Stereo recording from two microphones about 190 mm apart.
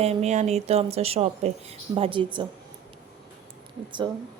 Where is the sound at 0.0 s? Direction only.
35° right (ahead or behind).